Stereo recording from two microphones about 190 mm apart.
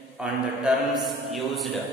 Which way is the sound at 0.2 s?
Centre (ahead or behind).